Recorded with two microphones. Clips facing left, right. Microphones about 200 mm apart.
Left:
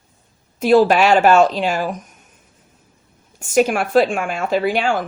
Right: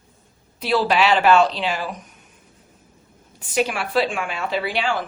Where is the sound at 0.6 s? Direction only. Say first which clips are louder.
Left 7 dB; 45° left (ahead or behind).